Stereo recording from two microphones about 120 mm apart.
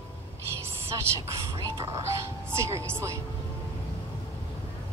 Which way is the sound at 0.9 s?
25° right (ahead or behind).